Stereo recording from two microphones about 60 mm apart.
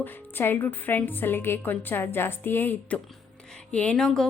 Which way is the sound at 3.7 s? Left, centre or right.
Centre.